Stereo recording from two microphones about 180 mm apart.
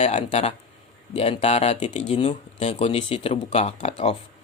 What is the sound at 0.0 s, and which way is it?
Speech, 40° left (ahead or behind).